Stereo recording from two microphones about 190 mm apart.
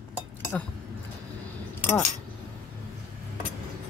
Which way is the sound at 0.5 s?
5° left (ahead or behind).